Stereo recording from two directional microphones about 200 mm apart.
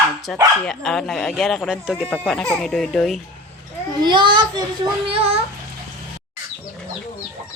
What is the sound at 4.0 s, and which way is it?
A child's voice, 25° right (ahead or behind).